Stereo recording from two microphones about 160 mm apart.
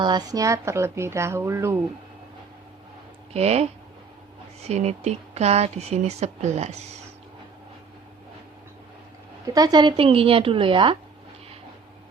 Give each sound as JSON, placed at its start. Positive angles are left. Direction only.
{"t": 0.0, "sound": "a woman's voice", "side_deg": -25}
{"t": 3.3, "sound": "a woman's voice", "side_deg": -40}
{"t": 9.5, "sound": "a woman's voice", "side_deg": -25}